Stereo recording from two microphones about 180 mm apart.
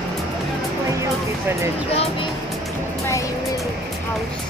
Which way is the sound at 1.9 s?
35° left (ahead or behind).